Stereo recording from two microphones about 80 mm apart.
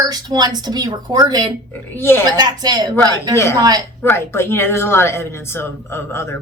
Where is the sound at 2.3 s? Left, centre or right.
Right.